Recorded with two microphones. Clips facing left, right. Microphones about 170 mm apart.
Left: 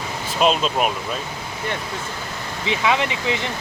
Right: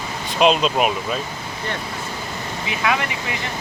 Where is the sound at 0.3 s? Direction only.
Centre (ahead or behind).